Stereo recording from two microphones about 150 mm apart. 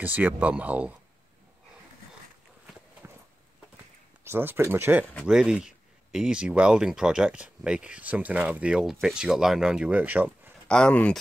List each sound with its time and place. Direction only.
0.0 s speech: 10° right (ahead or behind)
3.0 s a sound: 15° right (ahead or behind)
4.2 s speech: 15° right (ahead or behind)
10.7 s speech: 5° left (ahead or behind)